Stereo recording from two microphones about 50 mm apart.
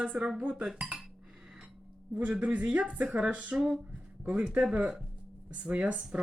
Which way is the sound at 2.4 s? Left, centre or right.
Right.